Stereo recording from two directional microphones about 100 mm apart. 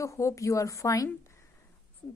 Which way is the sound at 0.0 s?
30° left (ahead or behind).